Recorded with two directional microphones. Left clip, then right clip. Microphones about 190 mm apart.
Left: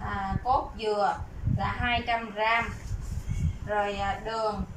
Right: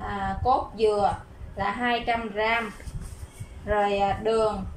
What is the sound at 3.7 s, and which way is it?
Speech, 35° right (ahead or behind).